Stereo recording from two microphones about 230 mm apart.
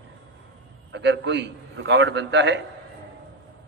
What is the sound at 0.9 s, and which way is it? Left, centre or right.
A man's voice, right.